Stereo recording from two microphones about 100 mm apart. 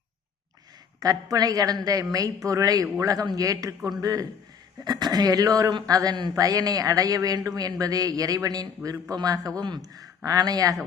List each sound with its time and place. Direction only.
0.9 s speech: 35° right (ahead or behind)